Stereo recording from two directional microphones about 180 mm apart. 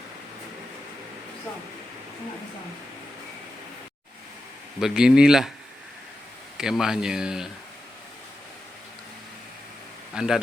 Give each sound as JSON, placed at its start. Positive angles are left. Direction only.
{"t": 4.8, "sound": "speech", "side_deg": -5}
{"t": 6.6, "sound": "speech", "side_deg": -5}
{"t": 10.2, "sound": "speech", "side_deg": -5}